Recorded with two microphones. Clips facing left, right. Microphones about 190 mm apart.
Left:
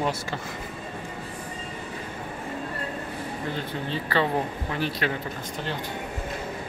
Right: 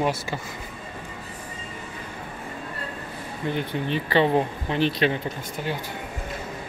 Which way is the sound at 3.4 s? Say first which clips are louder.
Right 7 dB; 20° right (ahead or behind).